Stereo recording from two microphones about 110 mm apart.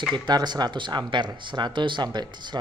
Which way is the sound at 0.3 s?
40° right (ahead or behind).